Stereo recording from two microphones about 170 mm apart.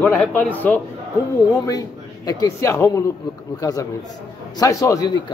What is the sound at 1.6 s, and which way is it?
A man's voice, 20° left (ahead or behind).